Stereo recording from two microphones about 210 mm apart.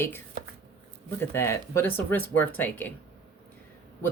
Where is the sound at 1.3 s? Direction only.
10° left (ahead or behind).